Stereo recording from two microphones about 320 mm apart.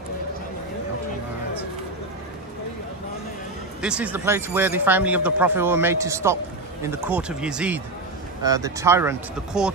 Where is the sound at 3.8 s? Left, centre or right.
Centre.